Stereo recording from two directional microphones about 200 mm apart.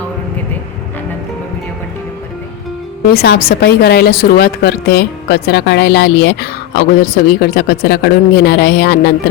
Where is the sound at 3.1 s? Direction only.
50° left (ahead or behind).